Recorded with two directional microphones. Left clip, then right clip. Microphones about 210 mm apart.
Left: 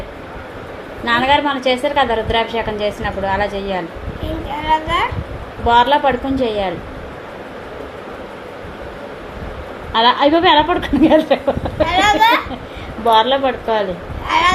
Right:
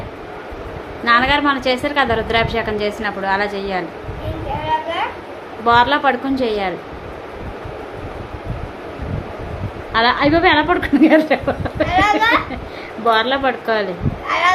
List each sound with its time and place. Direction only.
1.0 s a woman's voice: centre (ahead or behind)
5.6 s a woman's voice: centre (ahead or behind)
9.9 s a woman's voice: centre (ahead or behind)
11.9 s a child's voice: 15° right (ahead or behind)
13.1 s a woman's voice: 5° right (ahead or behind)
14.3 s speech: 20° right (ahead or behind)